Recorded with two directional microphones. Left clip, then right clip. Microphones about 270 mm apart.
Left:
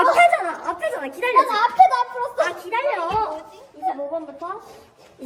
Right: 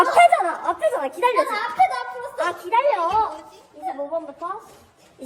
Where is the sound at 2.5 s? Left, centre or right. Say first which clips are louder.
Right 3 dB; centre.